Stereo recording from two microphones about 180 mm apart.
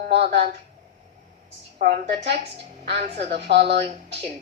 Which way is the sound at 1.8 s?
65° right (ahead or behind).